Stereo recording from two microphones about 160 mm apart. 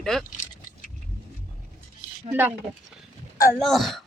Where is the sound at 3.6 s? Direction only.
Centre (ahead or behind).